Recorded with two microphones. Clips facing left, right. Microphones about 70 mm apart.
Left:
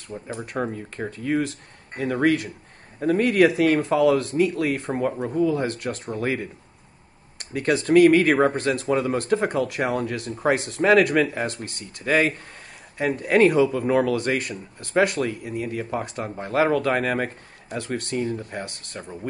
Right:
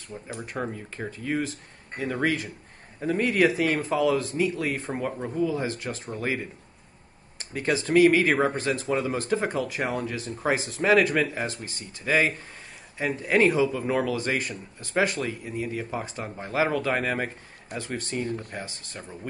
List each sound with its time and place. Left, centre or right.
0.1 s speech: centre
1.1 s a man's voice: left
7.5 s a man's voice: left